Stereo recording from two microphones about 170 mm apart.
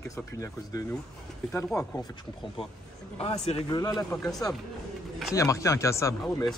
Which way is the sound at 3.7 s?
20° left (ahead or behind).